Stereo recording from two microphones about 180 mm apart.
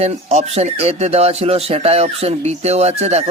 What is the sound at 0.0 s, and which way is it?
A man's voice, 35° right (ahead or behind).